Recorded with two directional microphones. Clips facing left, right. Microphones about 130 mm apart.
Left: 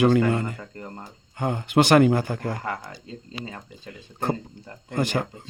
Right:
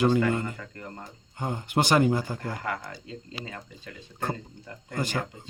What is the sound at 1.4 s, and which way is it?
Speech, 75° left (ahead or behind).